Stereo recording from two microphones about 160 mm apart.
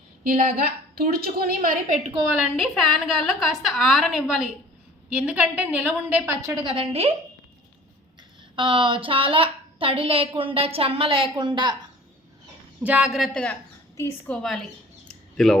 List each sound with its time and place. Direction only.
0.3 s a woman's voice: 60° right (ahead or behind)
2.4 s a woman's voice: centre (ahead or behind); by 7.1 s 35° right (ahead or behind)
8.5 s a woman's voice: 30° right (ahead or behind)
12.8 s a woman's voice: 5° right (ahead or behind)
13.9 s a woman's voice: 15° left (ahead or behind)
14.4 s a sound: centre (ahead or behind)